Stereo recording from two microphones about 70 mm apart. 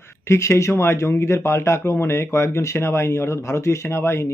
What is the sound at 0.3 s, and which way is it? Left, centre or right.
Speech, left.